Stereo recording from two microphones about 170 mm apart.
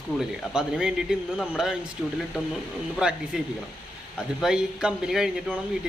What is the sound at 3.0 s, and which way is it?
Speech, 5° right (ahead or behind).